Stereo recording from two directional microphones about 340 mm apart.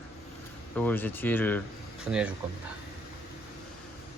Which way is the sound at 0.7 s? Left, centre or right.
Centre.